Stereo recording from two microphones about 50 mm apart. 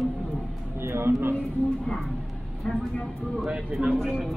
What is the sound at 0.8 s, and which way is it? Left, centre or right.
Speech, right.